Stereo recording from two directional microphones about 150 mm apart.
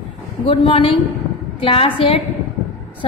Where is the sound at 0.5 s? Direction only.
40° left (ahead or behind).